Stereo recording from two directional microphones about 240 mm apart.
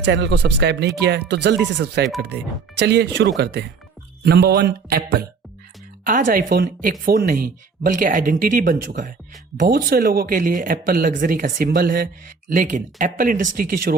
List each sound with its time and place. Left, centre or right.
0.0 s speech: right